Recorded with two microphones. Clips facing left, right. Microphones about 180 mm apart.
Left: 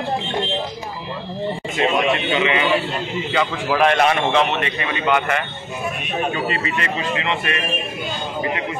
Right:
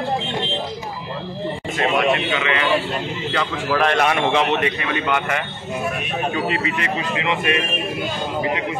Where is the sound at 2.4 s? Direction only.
20° left (ahead or behind).